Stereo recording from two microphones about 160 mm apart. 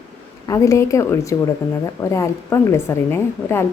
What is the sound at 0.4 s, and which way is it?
A woman's voice, 20° left (ahead or behind).